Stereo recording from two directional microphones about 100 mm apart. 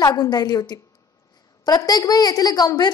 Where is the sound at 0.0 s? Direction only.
40° left (ahead or behind).